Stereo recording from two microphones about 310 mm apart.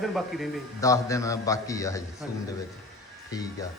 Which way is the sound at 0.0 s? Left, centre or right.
Centre.